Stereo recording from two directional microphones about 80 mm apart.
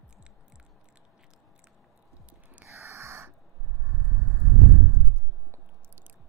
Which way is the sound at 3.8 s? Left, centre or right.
Right.